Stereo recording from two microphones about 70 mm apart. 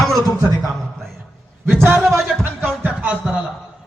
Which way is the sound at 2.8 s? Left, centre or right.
Right.